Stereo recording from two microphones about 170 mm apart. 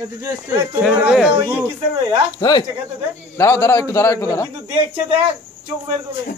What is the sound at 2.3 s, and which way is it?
A man's voice, 25° left (ahead or behind).